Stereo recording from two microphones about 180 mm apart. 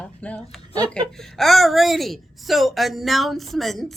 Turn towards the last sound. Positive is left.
turn(degrees=0)  # may be behind; listen again after turning